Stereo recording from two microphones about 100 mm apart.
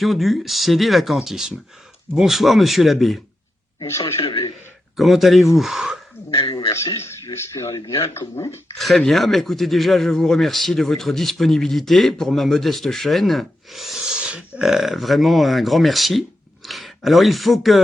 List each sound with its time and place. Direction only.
0.0 s speech: centre (ahead or behind)
4.9 s speech: centre (ahead or behind)
6.7 s a man's voice: 30° left (ahead or behind)
8.8 s speech: centre (ahead or behind)